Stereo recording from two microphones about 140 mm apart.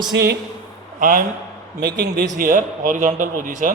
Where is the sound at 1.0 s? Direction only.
75° right (ahead or behind).